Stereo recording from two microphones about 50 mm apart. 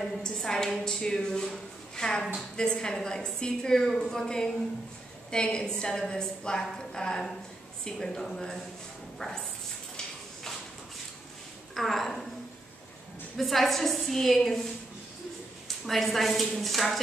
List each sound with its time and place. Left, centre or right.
0.0 s a woman's voice: centre
11.7 s a woman's voice: centre
13.4 s a woman's voice: centre
15.9 s a woman's voice: centre